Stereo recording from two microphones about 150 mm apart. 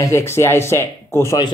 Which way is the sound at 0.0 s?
15° left (ahead or behind).